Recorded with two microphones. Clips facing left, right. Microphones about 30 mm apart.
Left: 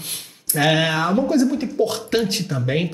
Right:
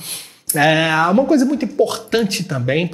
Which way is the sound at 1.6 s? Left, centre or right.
Right.